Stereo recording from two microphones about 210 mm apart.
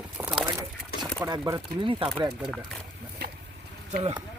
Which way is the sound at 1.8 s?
25° right (ahead or behind).